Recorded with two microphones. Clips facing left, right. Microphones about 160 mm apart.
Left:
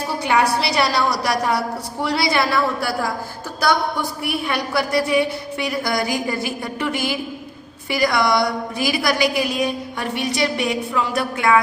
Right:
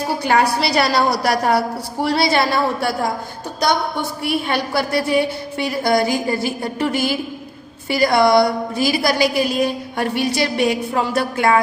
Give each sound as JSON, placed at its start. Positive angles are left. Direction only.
{"t": 0.3, "sound": "a woman's voice", "side_deg": -40}